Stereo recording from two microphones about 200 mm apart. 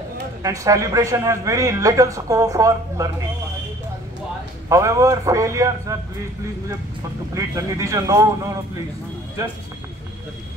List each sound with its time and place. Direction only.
0.4 s speech: 15° right (ahead or behind)
4.6 s speech: 15° right (ahead or behind)
7.3 s speech: 15° right (ahead or behind)